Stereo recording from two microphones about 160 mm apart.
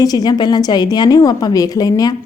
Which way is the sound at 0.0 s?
25° left (ahead or behind).